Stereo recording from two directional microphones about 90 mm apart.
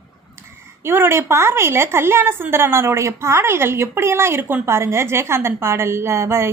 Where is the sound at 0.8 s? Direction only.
25° right (ahead or behind).